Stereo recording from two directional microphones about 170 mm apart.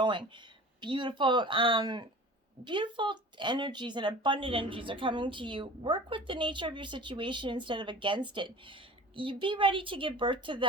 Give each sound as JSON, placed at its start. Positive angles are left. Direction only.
{"t": 0.0, "sound": "speech", "side_deg": -30}